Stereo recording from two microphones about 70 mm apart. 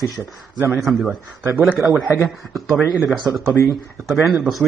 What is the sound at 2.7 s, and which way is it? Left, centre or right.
Speech, centre.